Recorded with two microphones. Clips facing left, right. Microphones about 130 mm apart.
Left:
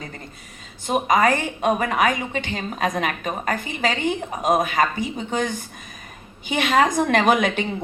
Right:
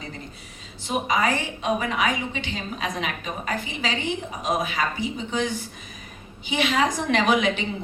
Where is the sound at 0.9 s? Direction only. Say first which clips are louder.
Left 5 dB; 50° left (ahead or behind).